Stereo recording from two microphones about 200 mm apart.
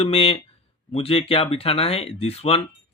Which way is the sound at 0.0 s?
30° left (ahead or behind).